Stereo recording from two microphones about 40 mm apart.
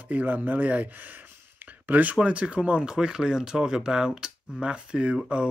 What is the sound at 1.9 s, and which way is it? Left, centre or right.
Speech, right.